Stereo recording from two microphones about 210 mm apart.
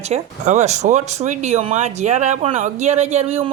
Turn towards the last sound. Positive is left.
turn(degrees=-30)  # may be behind; listen again after turning